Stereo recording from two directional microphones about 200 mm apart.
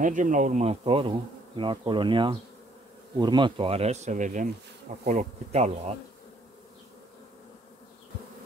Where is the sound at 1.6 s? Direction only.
25° right (ahead or behind).